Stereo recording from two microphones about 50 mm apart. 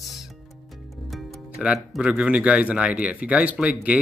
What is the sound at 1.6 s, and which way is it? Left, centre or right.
Speech, right.